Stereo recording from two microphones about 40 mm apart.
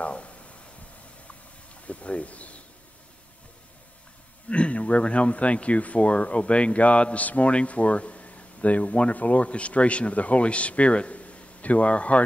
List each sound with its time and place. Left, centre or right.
0.0 s a sound: left
1.9 s speech: left
4.5 s a man's voice: left
9.1 s a man's voice: left